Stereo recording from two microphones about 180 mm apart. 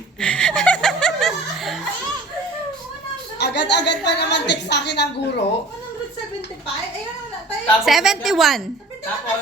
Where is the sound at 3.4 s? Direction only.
70° left (ahead or behind).